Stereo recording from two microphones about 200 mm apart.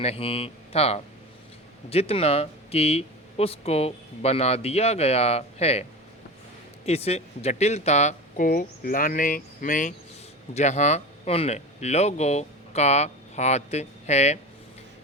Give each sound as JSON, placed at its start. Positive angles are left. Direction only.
{"t": 0.0, "sound": "speech", "side_deg": 30}
{"t": 6.8, "sound": "speech", "side_deg": 30}